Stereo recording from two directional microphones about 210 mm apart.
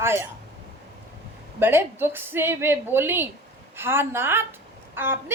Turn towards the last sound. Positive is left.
turn(degrees=-10)  # may be behind; listen again after turning